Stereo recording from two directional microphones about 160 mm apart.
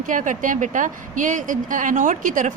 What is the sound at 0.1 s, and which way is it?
A woman's voice, 55° right (ahead or behind).